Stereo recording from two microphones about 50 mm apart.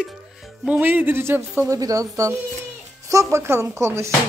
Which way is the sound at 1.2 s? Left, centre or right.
Right.